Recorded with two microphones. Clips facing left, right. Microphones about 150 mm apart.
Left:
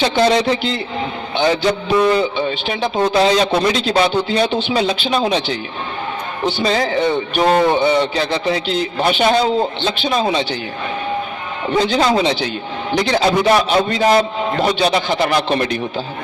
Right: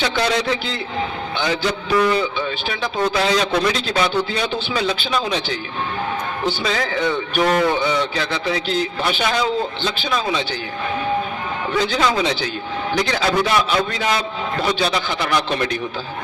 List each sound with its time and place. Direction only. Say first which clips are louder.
0.0 s a man's voice: left 6 dB; 25° left (ahead or behind)
6.7 s a man's voice: left 6 dB; 30° left (ahead or behind)
9.0 s speech: left 6 dB; 50° left (ahead or behind)
9.3 s a man's voice: left 5 dB; 30° left (ahead or behind)
11.7 s a man's voice: left 5 dB; 35° left (ahead or behind)
13.5 s a man's voice: left 5 dB; 45° left (ahead or behind)
15.3 s a man's voice: left 3 dB; 35° left (ahead or behind)